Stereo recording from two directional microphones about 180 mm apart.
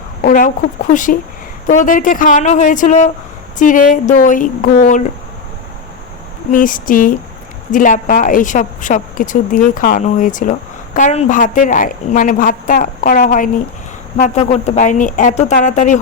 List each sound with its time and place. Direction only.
0.2 s a sound: 50° left (ahead or behind)
0.9 s a woman's voice: 45° left (ahead or behind)
6.5 s a woman's voice: 50° left (ahead or behind)
14.2 s a woman's voice: 40° left (ahead or behind)